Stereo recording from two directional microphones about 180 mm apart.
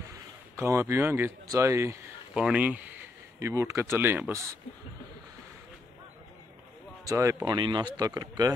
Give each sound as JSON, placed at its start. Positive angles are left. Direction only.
{"t": 0.1, "sound": "speech", "side_deg": -15}
{"t": 7.1, "sound": "speech", "side_deg": -15}